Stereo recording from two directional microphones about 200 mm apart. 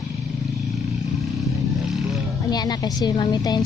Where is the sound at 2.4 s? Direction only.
20° left (ahead or behind).